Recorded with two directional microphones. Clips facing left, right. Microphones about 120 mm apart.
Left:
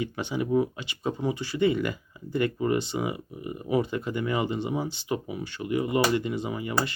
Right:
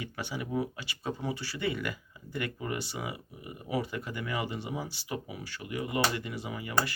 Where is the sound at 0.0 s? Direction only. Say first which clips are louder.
Left 8 dB; 20° left (ahead or behind).